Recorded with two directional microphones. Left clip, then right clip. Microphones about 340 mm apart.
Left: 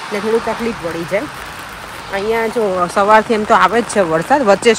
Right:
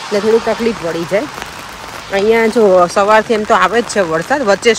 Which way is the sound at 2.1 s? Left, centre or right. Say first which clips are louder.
Right 6 dB; right.